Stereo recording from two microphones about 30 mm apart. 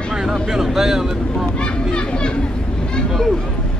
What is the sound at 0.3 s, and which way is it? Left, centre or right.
Speech, centre.